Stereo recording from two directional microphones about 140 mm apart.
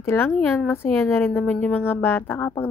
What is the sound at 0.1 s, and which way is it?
Speech, 15° left (ahead or behind).